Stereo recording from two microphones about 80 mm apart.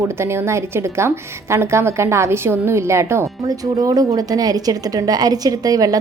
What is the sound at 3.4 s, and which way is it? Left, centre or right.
Speech, right.